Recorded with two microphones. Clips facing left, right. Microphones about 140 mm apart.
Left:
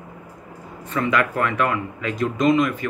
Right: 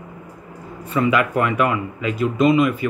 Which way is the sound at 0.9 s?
10° right (ahead or behind).